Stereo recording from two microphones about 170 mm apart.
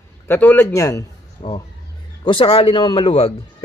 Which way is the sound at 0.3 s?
10° left (ahead or behind).